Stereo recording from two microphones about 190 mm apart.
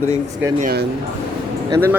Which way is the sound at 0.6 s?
55° right (ahead or behind).